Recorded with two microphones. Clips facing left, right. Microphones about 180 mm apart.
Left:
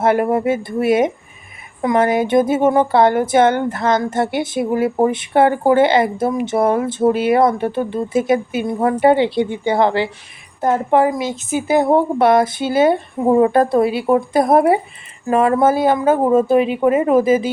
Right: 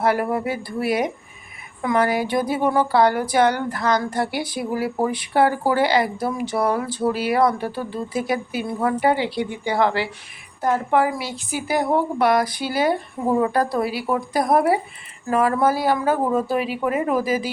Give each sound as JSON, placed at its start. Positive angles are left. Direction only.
{"t": 0.0, "sound": "a woman's voice", "side_deg": 25}